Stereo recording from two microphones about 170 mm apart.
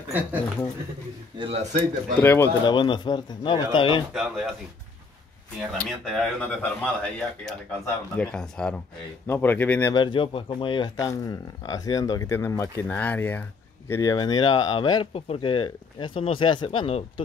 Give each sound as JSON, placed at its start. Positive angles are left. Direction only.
{"t": 1.4, "sound": "speech", "side_deg": -40}
{"t": 2.1, "sound": "speech", "side_deg": 15}
{"t": 2.6, "sound": "speech", "side_deg": 25}
{"t": 4.1, "sound": "speech", "side_deg": -5}
{"t": 5.6, "sound": "speech", "side_deg": 0}
{"t": 9.9, "sound": "speech", "side_deg": 30}